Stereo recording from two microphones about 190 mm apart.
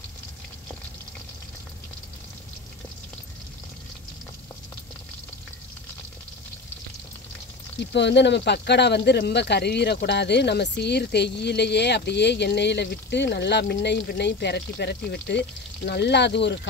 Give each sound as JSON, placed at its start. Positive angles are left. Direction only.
{"t": 7.8, "sound": "speech", "side_deg": 65}